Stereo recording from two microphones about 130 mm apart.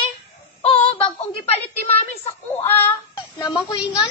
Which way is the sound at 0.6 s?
45° left (ahead or behind).